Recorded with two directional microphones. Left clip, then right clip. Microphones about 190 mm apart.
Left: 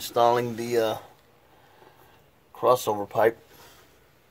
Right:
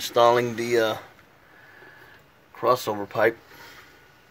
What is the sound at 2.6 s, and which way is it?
Speech, 15° left (ahead or behind).